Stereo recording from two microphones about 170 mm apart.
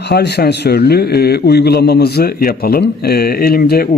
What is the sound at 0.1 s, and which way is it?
A man's voice, 75° left (ahead or behind).